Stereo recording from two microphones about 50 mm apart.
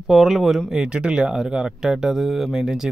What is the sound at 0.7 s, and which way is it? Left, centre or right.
Speech, centre.